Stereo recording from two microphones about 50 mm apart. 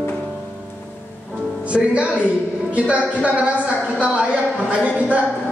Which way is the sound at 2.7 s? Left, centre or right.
Right.